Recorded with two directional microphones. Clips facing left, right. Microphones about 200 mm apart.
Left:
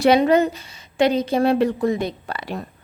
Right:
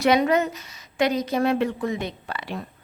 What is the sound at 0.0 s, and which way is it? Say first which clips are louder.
A woman's voice: left 4 dB; 30° left (ahead or behind).